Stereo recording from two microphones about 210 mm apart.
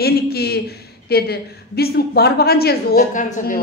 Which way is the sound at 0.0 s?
50° left (ahead or behind).